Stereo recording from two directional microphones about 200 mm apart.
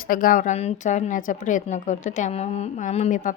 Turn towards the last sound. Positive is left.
turn(degrees=40)  # may be behind; listen again after turning